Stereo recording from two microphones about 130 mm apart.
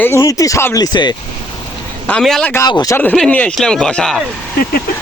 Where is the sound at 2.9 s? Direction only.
15° left (ahead or behind).